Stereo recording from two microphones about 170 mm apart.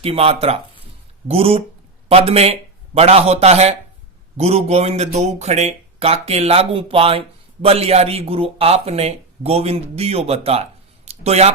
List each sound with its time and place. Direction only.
0.0 s a man's voice: 35° right (ahead or behind)